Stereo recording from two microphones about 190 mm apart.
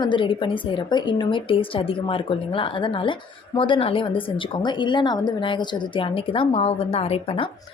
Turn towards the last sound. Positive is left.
turn(degrees=30)  # may be behind; listen again after turning